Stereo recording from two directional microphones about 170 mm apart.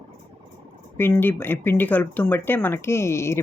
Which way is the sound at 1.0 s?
10° left (ahead or behind).